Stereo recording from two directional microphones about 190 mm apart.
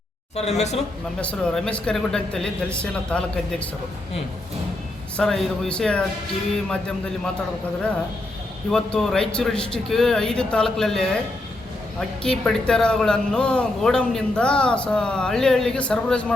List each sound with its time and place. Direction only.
0.3 s speech: 35° left (ahead or behind)
1.2 s a man's voice: 5° left (ahead or behind)
5.1 s a man's voice: 5° left (ahead or behind)
8.7 s a man's voice: 5° left (ahead or behind)